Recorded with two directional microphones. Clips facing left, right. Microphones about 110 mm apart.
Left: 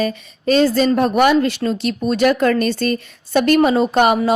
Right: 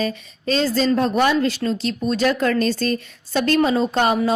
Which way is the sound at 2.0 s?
60° left (ahead or behind).